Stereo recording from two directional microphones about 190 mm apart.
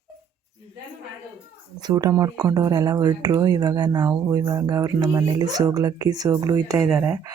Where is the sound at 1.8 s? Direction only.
20° right (ahead or behind).